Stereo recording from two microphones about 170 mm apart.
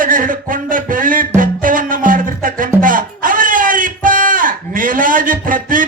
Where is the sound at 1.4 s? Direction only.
50° right (ahead or behind).